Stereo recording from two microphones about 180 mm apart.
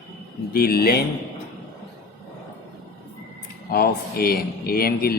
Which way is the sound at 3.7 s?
55° left (ahead or behind).